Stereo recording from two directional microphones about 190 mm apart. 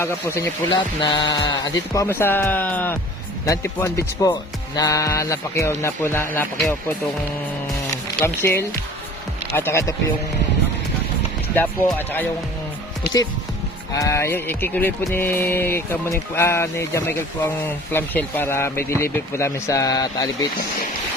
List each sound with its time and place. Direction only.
0.0 s music: 15° left (ahead or behind)
8.2 s music: 15° left (ahead or behind)
11.5 s music: 10° left (ahead or behind)
13.9 s music: 15° left (ahead or behind)